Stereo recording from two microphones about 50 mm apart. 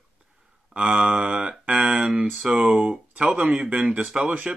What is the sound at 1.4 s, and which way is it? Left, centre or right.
Speech, right.